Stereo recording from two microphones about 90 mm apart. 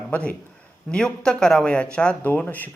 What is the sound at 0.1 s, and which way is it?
A man's voice, 15° left (ahead or behind).